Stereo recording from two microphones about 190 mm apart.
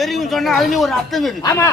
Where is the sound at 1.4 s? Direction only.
15° left (ahead or behind).